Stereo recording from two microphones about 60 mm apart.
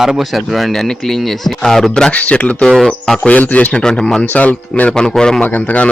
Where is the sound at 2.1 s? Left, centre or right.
Left.